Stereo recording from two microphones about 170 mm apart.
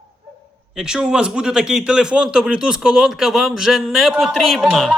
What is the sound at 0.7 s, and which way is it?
A man's voice, 5° right (ahead or behind).